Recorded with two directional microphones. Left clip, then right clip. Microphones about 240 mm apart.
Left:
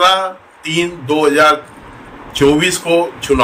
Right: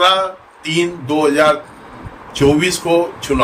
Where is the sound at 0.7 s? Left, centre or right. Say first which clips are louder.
Left 1 dB; centre.